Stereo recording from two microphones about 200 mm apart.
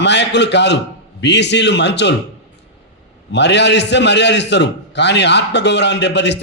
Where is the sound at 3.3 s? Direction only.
60° left (ahead or behind).